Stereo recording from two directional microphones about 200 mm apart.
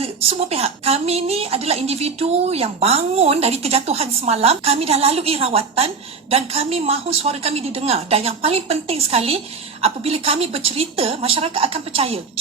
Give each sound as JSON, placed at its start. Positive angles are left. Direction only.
{"t": 0.0, "sound": "a woman's voice", "side_deg": -30}